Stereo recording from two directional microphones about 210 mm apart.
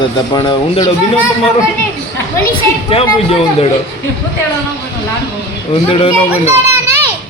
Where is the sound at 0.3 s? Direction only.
20° left (ahead or behind).